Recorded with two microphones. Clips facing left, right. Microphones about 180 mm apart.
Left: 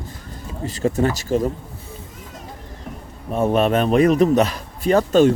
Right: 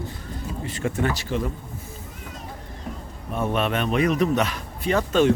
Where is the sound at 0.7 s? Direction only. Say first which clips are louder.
Left 6 dB; 40° left (ahead or behind).